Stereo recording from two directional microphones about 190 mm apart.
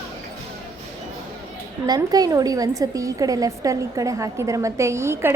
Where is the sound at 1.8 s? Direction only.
20° right (ahead or behind).